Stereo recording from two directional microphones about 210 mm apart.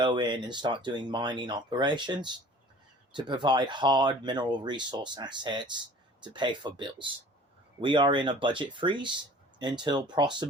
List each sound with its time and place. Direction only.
0.0 s speech: 20° right (ahead or behind)